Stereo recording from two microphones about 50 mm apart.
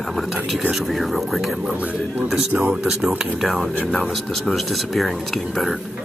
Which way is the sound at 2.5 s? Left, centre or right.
Right.